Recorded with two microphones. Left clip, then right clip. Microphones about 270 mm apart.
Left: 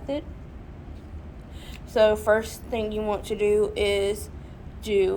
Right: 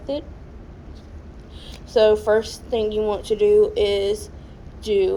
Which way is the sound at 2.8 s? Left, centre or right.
Left.